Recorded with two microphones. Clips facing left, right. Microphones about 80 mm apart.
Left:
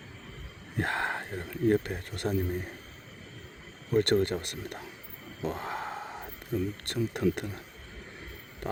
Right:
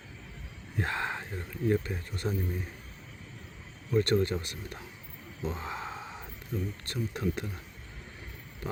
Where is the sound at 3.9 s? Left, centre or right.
Left.